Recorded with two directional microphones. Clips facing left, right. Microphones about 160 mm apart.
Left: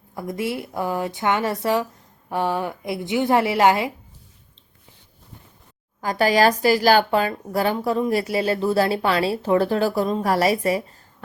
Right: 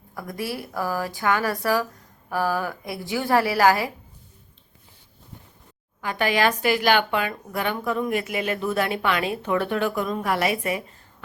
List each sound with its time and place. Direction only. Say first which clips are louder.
0.1 s speech: left 4 dB; 25° left (ahead or behind)
6.0 s speech: left 4 dB; 35° left (ahead or behind)